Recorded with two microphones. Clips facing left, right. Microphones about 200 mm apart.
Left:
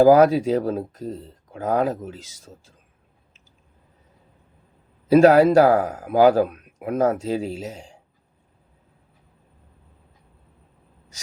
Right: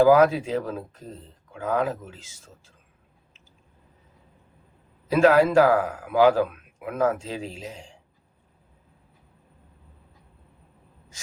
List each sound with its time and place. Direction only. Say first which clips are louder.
0.0 s speech: left 3 dB; 40° left (ahead or behind)
5.0 s speech: left 5 dB; 40° left (ahead or behind)